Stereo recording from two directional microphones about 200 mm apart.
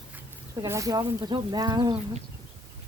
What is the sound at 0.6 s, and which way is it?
Speech, 15° right (ahead or behind).